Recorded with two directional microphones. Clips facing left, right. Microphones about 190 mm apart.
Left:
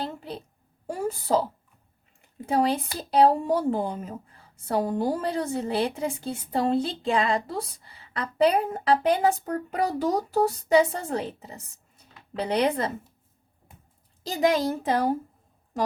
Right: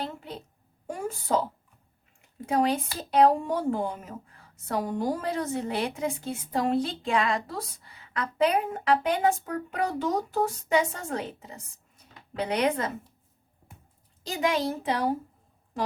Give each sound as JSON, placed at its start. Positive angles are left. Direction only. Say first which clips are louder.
{"t": 0.9, "sound": "a woman's voice", "louder": "left 3 dB", "side_deg": 35}
{"t": 2.5, "sound": "speech", "louder": "left 1 dB", "side_deg": 30}
{"t": 14.3, "sound": "a child's voice", "louder": "left 4 dB", "side_deg": 40}